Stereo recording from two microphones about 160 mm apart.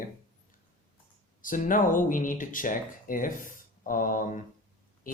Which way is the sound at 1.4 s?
55° left (ahead or behind).